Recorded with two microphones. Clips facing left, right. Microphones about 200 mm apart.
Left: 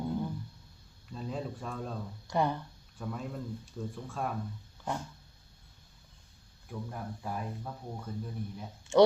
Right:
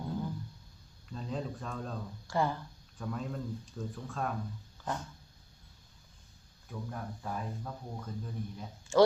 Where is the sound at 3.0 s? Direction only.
5° left (ahead or behind).